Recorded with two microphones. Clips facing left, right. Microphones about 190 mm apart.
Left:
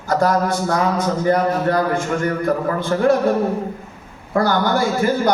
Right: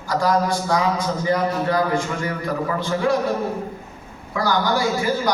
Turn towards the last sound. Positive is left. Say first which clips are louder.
# left 3 dB
turn(degrees=50)  # may be behind; listen again after turning